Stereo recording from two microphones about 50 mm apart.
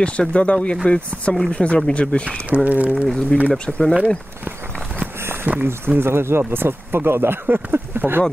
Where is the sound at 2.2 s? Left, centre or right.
Right.